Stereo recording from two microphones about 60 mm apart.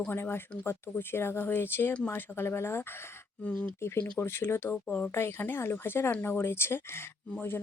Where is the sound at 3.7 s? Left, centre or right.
Left.